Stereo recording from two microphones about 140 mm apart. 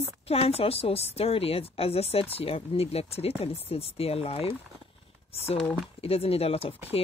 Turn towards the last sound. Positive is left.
turn(degrees=40)  # may be behind; listen again after turning